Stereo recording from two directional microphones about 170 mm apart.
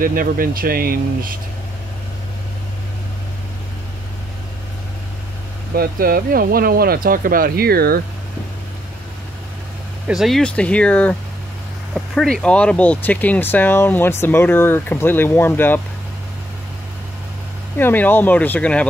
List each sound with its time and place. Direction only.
0.0 s speech: 55° right (ahead or behind)
5.8 s speech: 60° right (ahead or behind)
10.0 s speech: centre (ahead or behind)
17.7 s speech: 10° left (ahead or behind)